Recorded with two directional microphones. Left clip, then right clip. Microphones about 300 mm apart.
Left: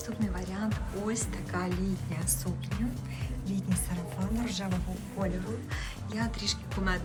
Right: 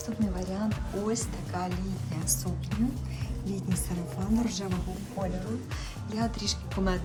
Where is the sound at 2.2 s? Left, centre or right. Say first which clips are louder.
Right 3 dB; centre.